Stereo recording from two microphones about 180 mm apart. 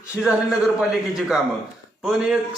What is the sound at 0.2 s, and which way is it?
A man's voice, 5° right (ahead or behind).